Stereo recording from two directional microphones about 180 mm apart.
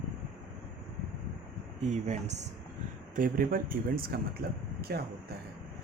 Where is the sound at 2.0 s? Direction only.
40° right (ahead or behind).